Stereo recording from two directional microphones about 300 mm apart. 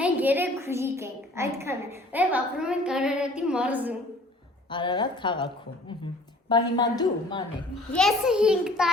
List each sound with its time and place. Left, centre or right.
0.0 s a woman's voice: centre
4.7 s a woman's voice: centre
6.5 s a woman's voice: centre
7.9 s a woman's voice: centre